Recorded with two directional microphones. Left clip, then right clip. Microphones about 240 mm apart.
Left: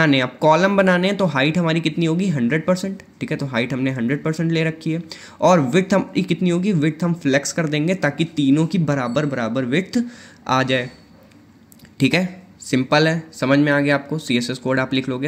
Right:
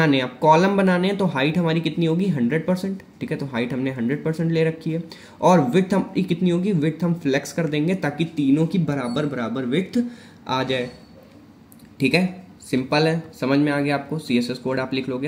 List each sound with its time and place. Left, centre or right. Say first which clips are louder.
0.0 s speech: left 2 dB; left
12.0 s speech: left 1 dB; left